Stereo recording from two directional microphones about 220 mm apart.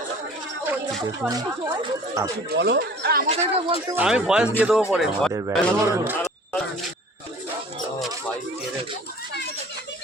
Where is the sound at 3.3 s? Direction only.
25° right (ahead or behind).